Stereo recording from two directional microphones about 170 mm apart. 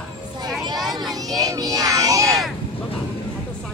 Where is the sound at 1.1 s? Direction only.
20° right (ahead or behind).